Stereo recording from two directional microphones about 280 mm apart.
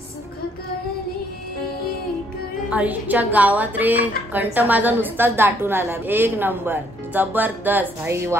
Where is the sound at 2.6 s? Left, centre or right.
Centre.